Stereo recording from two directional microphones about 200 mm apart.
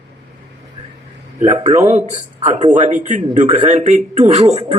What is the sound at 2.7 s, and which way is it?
A woman's voice, 40° right (ahead or behind).